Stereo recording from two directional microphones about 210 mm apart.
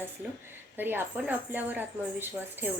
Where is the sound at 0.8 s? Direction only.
10° right (ahead or behind).